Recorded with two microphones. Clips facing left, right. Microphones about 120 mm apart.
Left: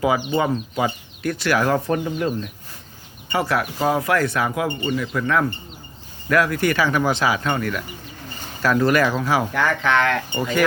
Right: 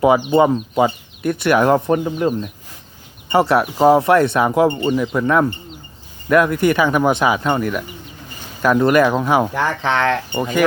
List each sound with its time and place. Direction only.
0.3 s speech: 20° right (ahead or behind)